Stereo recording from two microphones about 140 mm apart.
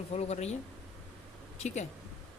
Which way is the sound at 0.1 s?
50° left (ahead or behind).